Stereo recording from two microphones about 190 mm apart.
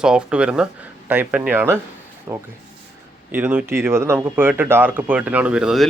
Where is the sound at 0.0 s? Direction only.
5° right (ahead or behind).